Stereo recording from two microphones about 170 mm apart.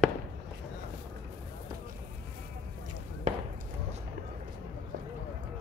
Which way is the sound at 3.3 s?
40° right (ahead or behind).